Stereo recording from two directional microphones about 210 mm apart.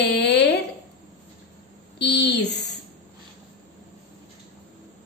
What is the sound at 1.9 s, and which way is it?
Speech, 55° left (ahead or behind).